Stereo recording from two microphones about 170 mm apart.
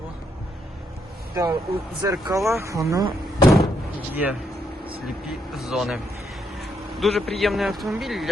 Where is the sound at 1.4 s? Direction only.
15° right (ahead or behind).